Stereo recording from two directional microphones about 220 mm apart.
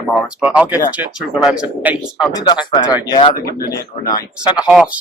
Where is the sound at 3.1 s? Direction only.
20° left (ahead or behind).